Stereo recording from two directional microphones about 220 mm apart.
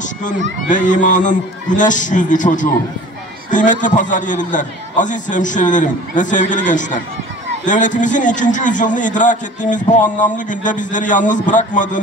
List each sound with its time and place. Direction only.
0.0 s a man's voice: 35° left (ahead or behind)